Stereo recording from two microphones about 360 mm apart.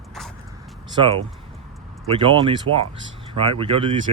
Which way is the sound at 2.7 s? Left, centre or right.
Right.